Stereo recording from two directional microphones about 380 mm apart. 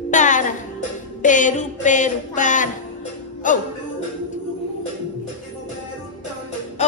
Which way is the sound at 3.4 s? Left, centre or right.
Centre.